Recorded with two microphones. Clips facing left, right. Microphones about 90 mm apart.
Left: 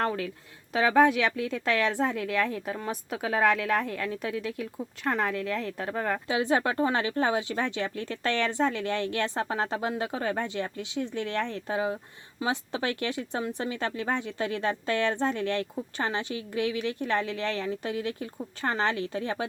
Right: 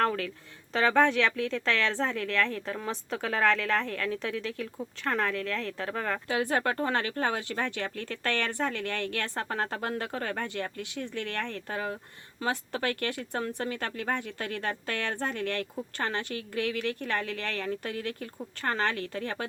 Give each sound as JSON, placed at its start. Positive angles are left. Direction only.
{"t": 0.0, "sound": "speech", "side_deg": 10}
{"t": 6.2, "sound": "speech", "side_deg": 20}